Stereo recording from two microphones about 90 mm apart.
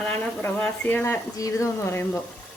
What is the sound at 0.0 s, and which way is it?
Speech, 20° left (ahead or behind).